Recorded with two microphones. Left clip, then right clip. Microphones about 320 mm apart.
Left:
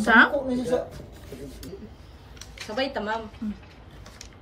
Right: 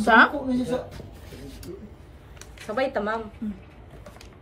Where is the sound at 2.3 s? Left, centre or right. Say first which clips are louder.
Right 2 dB; right.